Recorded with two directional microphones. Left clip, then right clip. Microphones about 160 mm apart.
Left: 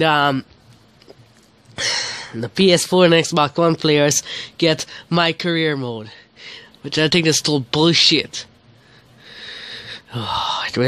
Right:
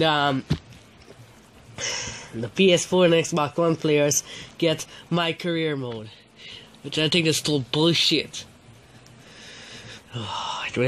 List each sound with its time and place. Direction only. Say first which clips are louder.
0.0 s speech: left 5 dB; 35° left (ahead or behind)
2.0 s speech: left 7 dB; 40° left (ahead or behind)
9.3 s a sound: left 10 dB; 45° left (ahead or behind)